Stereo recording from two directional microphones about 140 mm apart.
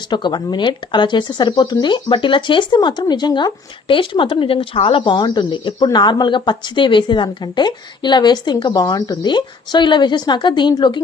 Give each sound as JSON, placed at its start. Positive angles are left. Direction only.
{"t": 0.1, "sound": "speech", "side_deg": 30}